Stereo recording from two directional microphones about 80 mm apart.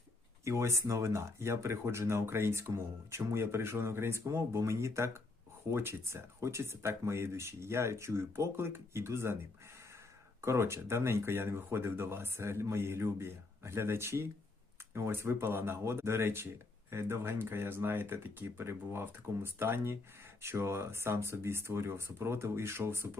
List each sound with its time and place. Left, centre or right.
0.4 s speech: right
10.4 s speech: right